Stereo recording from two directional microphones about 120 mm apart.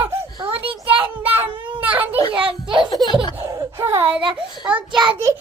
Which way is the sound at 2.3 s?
45° right (ahead or behind).